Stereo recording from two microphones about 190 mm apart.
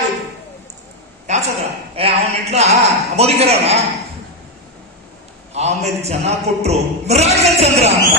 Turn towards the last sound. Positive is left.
turn(degrees=-35)  # may be behind; listen again after turning